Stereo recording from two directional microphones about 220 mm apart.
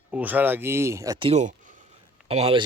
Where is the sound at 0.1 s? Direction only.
5° right (ahead or behind).